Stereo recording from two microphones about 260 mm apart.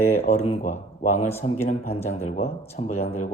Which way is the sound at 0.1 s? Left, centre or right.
Left.